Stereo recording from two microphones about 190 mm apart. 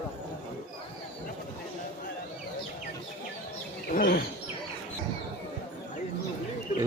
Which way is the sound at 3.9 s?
50° left (ahead or behind).